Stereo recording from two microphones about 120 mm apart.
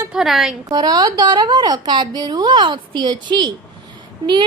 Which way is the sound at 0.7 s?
35° right (ahead or behind).